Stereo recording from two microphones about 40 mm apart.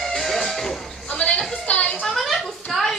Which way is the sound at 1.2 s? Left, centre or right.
Left.